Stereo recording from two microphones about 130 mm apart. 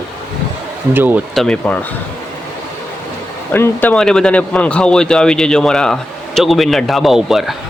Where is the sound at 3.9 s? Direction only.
5° left (ahead or behind).